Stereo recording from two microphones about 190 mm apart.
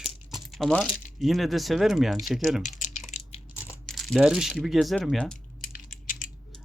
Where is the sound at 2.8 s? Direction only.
40° left (ahead or behind).